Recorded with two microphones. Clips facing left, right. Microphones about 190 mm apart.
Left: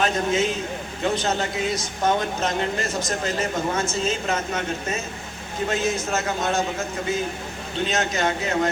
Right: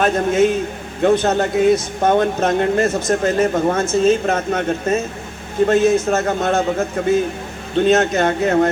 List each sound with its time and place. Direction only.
0.0 s speech: 55° right (ahead or behind)